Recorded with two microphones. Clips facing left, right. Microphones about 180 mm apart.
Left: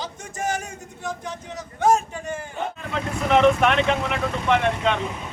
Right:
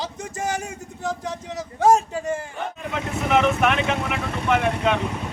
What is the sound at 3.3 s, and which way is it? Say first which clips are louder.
Speech: left 2 dB; 5° right (ahead or behind).